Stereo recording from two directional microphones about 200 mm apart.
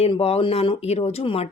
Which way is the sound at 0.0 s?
30° left (ahead or behind).